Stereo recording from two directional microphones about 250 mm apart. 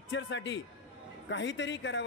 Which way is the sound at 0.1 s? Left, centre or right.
Left.